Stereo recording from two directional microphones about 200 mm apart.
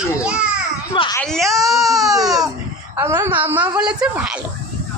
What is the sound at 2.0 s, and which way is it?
A woman's voice, 15° right (ahead or behind).